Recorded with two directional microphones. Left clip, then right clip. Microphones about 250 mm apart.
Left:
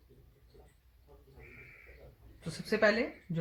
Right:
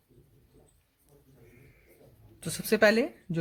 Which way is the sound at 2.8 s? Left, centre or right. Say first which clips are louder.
Right 5 dB; right.